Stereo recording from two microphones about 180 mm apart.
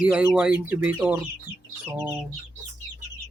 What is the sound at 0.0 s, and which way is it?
Speech, 5° right (ahead or behind).